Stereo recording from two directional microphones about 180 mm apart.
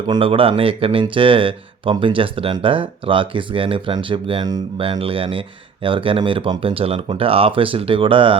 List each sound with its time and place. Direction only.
0.1 s speech: 30° right (ahead or behind)